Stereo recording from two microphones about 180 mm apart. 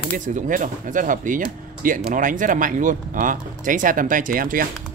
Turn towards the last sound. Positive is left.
turn(degrees=-50)  # may be behind; listen again after turning